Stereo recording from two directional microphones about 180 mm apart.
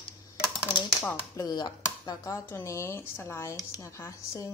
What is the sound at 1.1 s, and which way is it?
A woman's voice, 20° left (ahead or behind).